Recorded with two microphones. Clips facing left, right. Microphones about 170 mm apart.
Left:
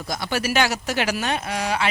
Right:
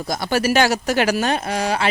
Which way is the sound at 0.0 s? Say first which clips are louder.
Right 5 dB; 40° right (ahead or behind).